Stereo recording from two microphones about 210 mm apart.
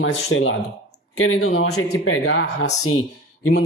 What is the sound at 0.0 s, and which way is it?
Speech, 70° left (ahead or behind).